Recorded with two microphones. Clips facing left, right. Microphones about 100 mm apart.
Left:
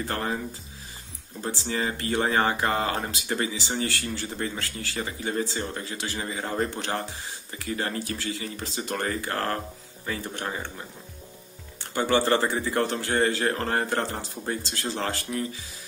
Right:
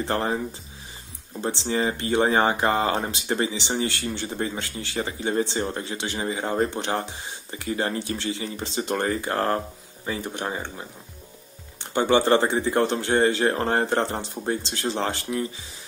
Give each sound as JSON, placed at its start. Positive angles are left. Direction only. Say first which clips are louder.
{"t": 0.0, "sound": "speech", "louder": "right 4 dB", "side_deg": -25}
{"t": 11.8, "sound": "speech", "louder": "right 3 dB", "side_deg": -20}